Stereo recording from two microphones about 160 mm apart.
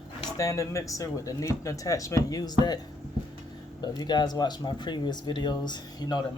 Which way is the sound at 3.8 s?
25° left (ahead or behind).